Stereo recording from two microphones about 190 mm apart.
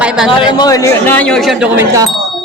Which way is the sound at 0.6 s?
20° left (ahead or behind).